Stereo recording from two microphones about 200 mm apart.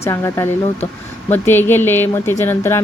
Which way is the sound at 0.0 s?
15° left (ahead or behind).